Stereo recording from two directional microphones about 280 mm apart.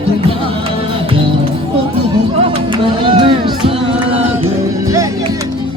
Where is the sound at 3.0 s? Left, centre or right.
Centre.